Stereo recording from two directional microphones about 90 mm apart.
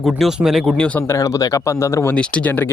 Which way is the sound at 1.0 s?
35° left (ahead or behind).